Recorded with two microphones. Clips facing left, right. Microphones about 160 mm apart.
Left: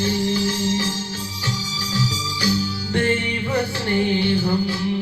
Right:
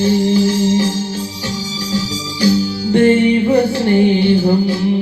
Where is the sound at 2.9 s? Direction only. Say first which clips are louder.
Right 12 dB; 20° right (ahead or behind).